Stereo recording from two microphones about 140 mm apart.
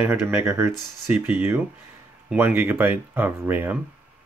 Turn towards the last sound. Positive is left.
turn(degrees=-15)  # may be behind; listen again after turning